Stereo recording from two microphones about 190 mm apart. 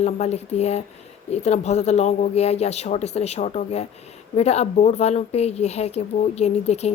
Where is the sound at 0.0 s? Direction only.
35° left (ahead or behind).